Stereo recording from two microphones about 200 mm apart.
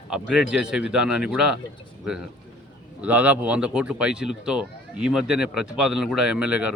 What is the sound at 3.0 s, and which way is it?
Speech, 10° right (ahead or behind).